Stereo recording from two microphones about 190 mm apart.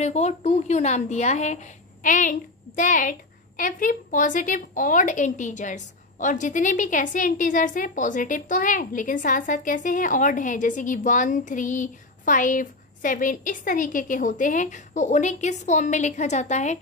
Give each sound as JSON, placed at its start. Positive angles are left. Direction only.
{"t": 0.0, "sound": "a woman's voice", "side_deg": 35}